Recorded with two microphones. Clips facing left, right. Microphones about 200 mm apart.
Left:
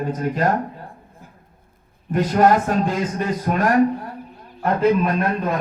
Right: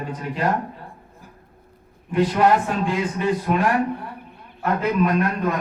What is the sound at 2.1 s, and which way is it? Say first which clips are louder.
A man's voice: left 2 dB; 45° left (ahead or behind).